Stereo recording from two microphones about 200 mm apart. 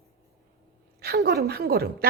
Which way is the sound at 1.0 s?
50° right (ahead or behind).